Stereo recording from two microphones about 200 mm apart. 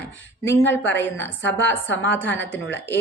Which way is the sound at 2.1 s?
10° left (ahead or behind).